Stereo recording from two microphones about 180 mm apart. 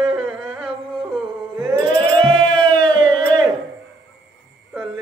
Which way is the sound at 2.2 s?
25° right (ahead or behind).